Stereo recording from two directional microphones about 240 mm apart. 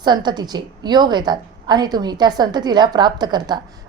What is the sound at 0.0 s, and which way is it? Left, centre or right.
A woman's voice, centre.